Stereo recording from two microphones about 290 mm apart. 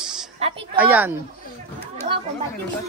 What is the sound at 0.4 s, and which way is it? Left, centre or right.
Speech, right.